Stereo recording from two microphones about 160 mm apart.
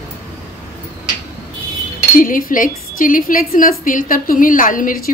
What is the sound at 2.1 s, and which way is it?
Speech, 60° left (ahead or behind).